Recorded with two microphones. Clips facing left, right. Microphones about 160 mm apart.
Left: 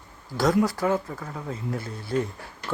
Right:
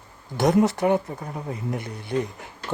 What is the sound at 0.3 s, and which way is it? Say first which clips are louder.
Speech: right 3 dB; 20° right (ahead or behind).